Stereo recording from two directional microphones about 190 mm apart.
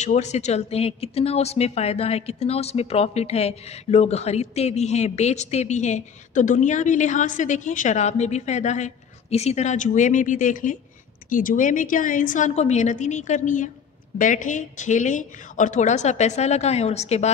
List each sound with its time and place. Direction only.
0.0 s a woman's voice: 35° left (ahead or behind)